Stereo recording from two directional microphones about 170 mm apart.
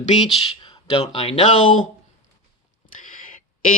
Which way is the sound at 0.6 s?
30° left (ahead or behind).